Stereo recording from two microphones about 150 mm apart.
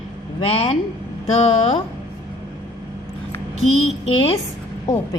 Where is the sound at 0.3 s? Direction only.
35° left (ahead or behind).